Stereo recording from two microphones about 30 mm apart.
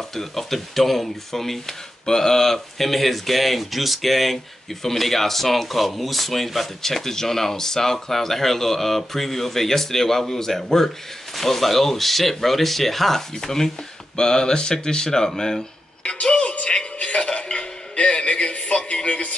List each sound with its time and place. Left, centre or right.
0.1 s speech: centre
16.1 s a man's voice: left
17.0 s music: left